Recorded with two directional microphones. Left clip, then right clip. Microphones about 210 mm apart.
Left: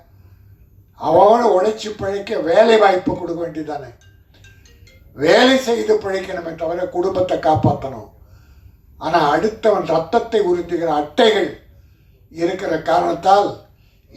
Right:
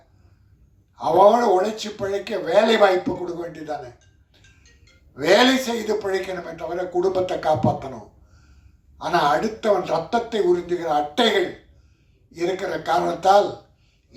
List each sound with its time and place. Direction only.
0.9 s speech: 55° right (ahead or behind)
5.1 s speech: 55° right (ahead or behind)
9.0 s speech: 55° right (ahead or behind)
12.3 s speech: 55° right (ahead or behind)